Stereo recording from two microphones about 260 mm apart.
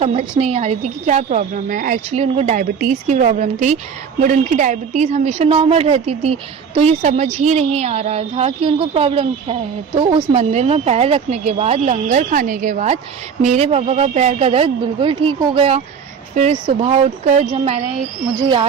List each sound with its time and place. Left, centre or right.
0.0 s a woman's voice: right